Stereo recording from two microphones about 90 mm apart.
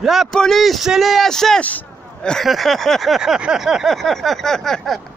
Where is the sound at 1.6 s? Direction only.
15° left (ahead or behind).